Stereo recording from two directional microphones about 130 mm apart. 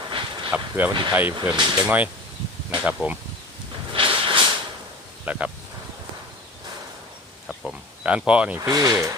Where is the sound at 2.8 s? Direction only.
5° right (ahead or behind).